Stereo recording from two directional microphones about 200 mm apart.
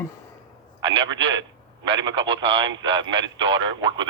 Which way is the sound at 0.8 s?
25° right (ahead or behind).